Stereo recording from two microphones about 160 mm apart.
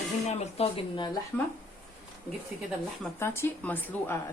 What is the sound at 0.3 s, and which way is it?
Speech, 40° left (ahead or behind).